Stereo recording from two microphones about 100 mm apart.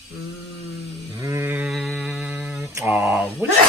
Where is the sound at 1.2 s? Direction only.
25° right (ahead or behind).